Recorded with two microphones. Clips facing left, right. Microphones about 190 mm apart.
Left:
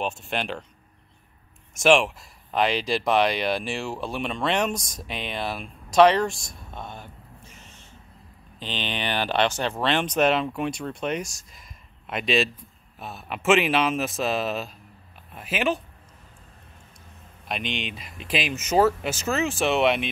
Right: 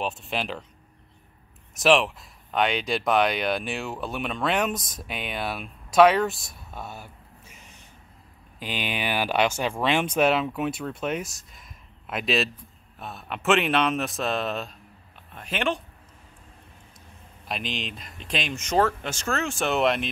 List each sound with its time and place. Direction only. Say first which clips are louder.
0.0 s speech: left 1 dB; centre (ahead or behind)
1.8 s speech: left 1 dB; centre (ahead or behind)
17.5 s speech: left 2 dB; centre (ahead or behind)